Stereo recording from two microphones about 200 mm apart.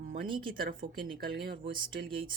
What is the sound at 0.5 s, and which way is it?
Speech, 45° right (ahead or behind).